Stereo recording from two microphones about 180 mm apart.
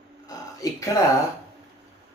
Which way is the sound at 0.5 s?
20° left (ahead or behind).